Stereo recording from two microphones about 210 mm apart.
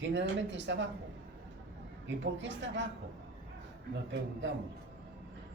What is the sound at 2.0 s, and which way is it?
Speech, 60° right (ahead or behind).